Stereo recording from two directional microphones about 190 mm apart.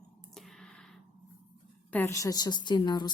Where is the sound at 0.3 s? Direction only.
Centre (ahead or behind).